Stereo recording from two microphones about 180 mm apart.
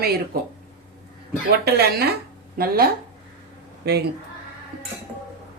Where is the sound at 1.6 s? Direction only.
60° right (ahead or behind).